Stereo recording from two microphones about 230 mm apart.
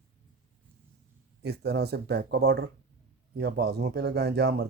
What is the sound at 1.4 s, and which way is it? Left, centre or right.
Speech, right.